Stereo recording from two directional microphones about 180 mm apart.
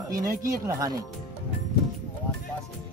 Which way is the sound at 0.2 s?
20° right (ahead or behind).